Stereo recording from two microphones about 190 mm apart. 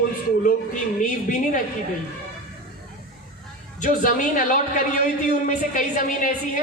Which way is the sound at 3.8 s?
45° left (ahead or behind).